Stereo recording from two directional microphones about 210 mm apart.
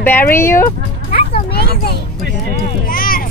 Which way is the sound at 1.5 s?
50° left (ahead or behind).